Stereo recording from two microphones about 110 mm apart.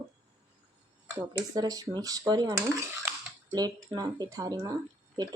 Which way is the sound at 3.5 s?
35° right (ahead or behind).